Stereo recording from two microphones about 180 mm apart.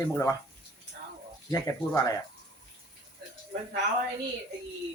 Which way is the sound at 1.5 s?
20° left (ahead or behind).